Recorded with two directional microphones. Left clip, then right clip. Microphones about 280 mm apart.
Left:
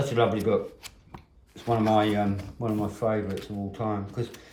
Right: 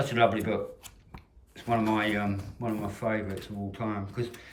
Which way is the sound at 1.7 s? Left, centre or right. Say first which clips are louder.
Left 4 dB; centre.